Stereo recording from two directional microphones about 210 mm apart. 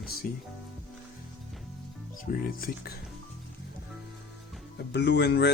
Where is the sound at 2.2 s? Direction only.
45° left (ahead or behind).